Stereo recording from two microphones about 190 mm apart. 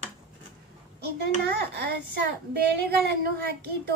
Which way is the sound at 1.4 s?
60° right (ahead or behind).